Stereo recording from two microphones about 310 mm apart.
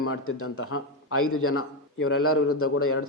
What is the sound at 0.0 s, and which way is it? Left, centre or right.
Speech, left.